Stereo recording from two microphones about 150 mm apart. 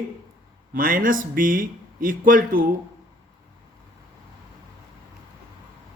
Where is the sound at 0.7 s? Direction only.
65° right (ahead or behind).